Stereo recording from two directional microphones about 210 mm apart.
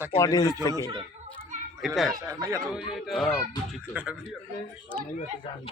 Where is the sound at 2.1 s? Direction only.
15° right (ahead or behind).